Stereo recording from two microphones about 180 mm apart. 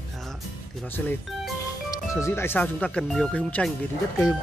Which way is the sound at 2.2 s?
15° left (ahead or behind).